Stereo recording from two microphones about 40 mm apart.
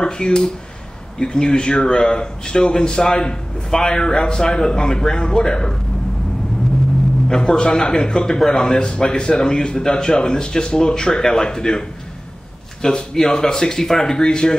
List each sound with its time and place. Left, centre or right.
0.0 s speech: left
7.2 s speech: centre
12.8 s speech: centre